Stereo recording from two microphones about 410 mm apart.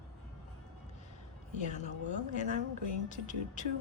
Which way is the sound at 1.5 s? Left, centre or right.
Centre.